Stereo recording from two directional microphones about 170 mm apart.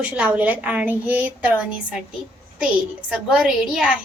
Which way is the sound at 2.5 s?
5° right (ahead or behind).